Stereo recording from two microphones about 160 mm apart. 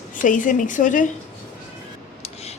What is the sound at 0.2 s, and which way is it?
Speech, 55° left (ahead or behind).